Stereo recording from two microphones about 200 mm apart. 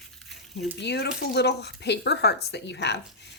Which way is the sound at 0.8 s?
55° left (ahead or behind).